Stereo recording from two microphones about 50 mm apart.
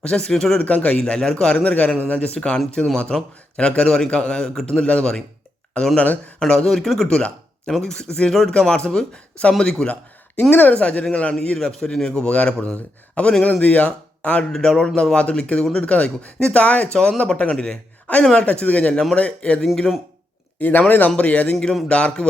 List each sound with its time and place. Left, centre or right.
0.0 s speech: left
0.3 s a man's voice: centre
0.6 s speech: left
1.5 s a man's voice: left
6.0 s speech: left
6.4 s a man's voice: centre
10.5 s speech: left
10.8 s speech: left
11.3 s a man's voice: centre
14.5 s a man's voice: centre
20.6 s speech: left
21.5 s a man's voice: centre
21.8 s speech: left